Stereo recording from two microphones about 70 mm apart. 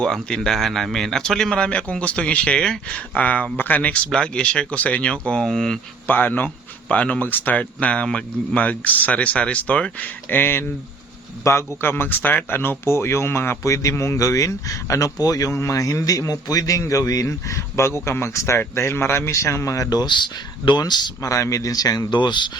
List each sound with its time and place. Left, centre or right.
0.0 s speech: centre
6.1 s speech: left
14.2 s a man's voice: left
15.5 s a man's voice: left
20.0 s speech: left
21.2 s speech: left